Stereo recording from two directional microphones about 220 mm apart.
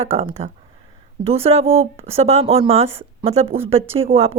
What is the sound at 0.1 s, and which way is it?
Speech, 30° right (ahead or behind).